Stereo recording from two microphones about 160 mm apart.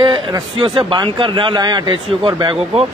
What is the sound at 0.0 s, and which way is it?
A man's voice, 30° right (ahead or behind).